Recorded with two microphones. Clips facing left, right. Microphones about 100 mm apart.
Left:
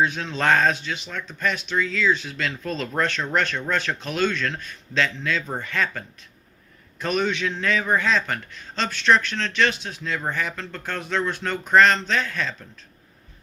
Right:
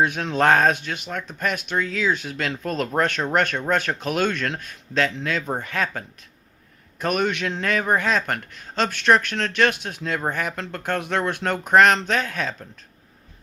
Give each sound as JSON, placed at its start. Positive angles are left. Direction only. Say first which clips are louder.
{"t": 0.0, "sound": "a man's voice", "louder": "right 3 dB", "side_deg": -60}
{"t": 7.0, "sound": "a man's voice", "louder": "right 1 dB", "side_deg": -55}